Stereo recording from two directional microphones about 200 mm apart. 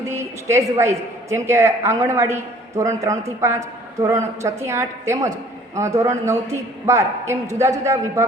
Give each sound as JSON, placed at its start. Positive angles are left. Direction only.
{"t": 0.0, "sound": "a woman's voice", "side_deg": -15}